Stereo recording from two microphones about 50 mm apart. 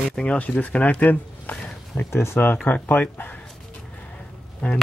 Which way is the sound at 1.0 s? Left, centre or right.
Left.